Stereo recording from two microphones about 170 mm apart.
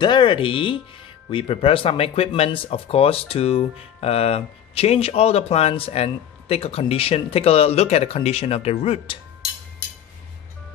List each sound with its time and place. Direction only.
0.0 s speech: 30° left (ahead or behind)